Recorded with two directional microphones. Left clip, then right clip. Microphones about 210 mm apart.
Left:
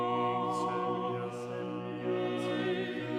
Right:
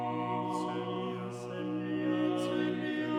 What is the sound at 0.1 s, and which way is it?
Music, 5° left (ahead or behind).